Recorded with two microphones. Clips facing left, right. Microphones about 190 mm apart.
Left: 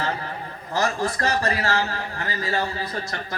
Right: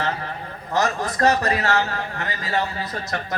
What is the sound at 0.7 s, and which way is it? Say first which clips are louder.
A man's voice: right 1 dB; 30° left (ahead or behind).